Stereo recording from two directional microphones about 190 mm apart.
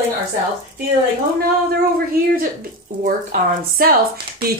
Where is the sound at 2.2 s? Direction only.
55° right (ahead or behind).